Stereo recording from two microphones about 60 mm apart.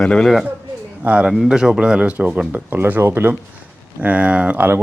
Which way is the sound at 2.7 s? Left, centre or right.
Right.